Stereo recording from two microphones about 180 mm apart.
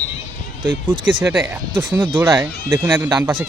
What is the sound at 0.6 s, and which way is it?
Speech, 10° right (ahead or behind).